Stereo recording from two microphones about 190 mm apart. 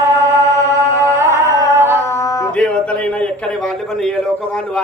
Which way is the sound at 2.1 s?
15° left (ahead or behind).